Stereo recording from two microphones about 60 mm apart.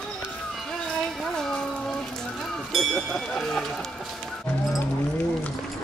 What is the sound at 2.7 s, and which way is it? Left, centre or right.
Speech, centre.